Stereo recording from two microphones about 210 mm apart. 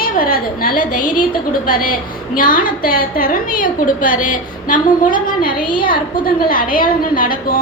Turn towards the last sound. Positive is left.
turn(degrees=45)  # may be behind; listen again after turning